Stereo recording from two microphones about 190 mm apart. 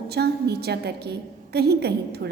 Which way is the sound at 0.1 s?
60° right (ahead or behind).